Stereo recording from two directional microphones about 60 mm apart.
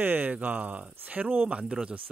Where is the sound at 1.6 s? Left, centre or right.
Centre.